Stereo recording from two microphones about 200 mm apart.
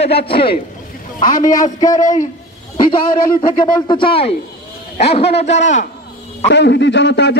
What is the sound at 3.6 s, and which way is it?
A man's voice, 20° left (ahead or behind).